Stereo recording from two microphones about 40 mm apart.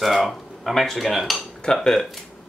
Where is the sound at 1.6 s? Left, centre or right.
Centre.